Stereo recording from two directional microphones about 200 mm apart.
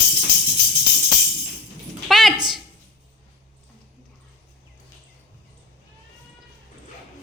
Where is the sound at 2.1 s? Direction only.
Centre (ahead or behind).